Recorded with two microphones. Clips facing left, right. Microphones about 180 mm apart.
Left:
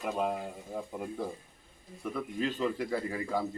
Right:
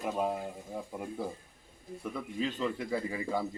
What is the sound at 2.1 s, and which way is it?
Speech, centre (ahead or behind).